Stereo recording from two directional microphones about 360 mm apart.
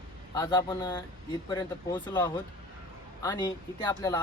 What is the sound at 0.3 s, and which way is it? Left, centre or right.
Speech, centre.